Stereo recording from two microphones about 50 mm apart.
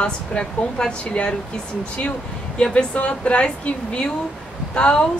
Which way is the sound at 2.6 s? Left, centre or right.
Left.